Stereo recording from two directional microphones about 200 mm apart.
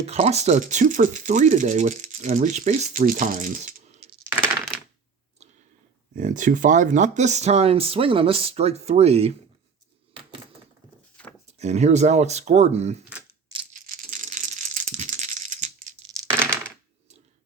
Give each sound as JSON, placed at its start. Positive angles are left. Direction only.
{"t": 0.0, "sound": "speech", "side_deg": -35}
{"t": 6.1, "sound": "speech", "side_deg": -40}
{"t": 11.4, "sound": "speech", "side_deg": -35}
{"t": 13.7, "sound": "rattle", "side_deg": -45}